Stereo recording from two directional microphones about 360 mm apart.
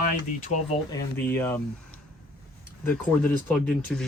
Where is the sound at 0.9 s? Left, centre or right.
Centre.